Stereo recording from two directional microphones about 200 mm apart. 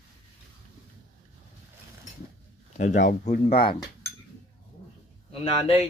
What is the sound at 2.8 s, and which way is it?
Speech, 40° left (ahead or behind).